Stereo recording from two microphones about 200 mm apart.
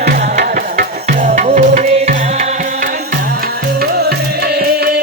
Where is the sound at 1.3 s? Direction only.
35° right (ahead or behind).